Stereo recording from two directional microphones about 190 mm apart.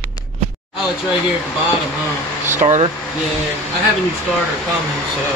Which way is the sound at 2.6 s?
35° right (ahead or behind).